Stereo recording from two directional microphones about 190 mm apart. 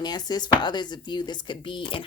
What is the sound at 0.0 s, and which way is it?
Speech, 20° left (ahead or behind).